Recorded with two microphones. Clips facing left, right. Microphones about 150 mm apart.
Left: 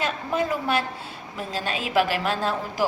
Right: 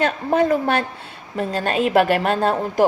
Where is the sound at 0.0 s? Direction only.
55° right (ahead or behind).